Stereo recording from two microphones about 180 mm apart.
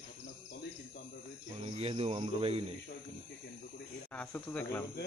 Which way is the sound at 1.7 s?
35° right (ahead or behind).